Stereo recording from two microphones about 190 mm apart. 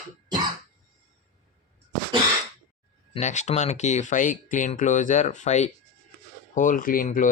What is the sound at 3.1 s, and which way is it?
Speech, 40° left (ahead or behind).